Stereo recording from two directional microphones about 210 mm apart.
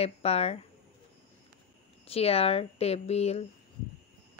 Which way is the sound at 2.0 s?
30° left (ahead or behind).